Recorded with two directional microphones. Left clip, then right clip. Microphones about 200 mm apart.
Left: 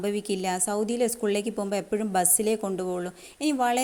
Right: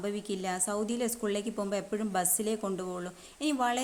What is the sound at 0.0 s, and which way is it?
A woman's voice, 25° left (ahead or behind).